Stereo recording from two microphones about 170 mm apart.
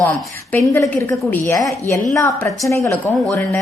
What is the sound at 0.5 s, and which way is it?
A woman's voice, 15° left (ahead or behind).